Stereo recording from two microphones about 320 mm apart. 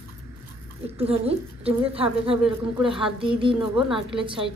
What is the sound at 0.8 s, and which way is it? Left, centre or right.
A woman's voice, centre.